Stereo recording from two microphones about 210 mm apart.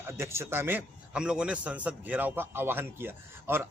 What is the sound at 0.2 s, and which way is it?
A man's voice, 10° right (ahead or behind).